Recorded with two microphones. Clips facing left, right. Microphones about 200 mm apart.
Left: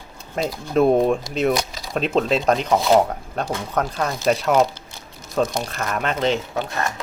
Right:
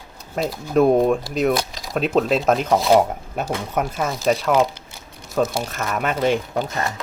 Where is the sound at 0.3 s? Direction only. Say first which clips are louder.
Right 1 dB; 5° right (ahead or behind).